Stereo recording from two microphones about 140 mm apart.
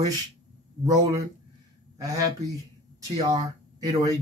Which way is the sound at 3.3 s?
25° right (ahead or behind).